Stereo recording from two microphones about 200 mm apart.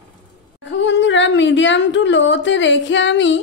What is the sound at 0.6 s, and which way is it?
A woman's voice, 65° left (ahead or behind).